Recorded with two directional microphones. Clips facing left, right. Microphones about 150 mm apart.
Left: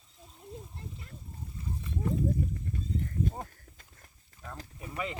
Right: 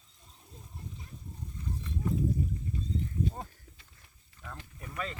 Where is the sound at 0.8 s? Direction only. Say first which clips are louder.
Left 1 dB; 70° left (ahead or behind).